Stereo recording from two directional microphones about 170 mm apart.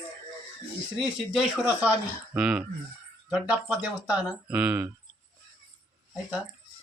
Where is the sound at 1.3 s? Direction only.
5° right (ahead or behind).